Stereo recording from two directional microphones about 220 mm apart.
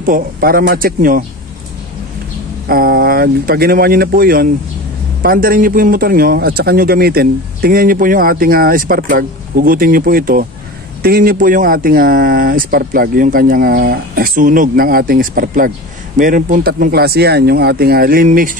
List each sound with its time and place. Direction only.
0.0 s speech: 40° right (ahead or behind)
2.6 s speech: 45° right (ahead or behind)